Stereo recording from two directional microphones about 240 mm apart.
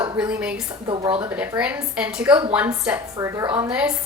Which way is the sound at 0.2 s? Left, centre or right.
Centre.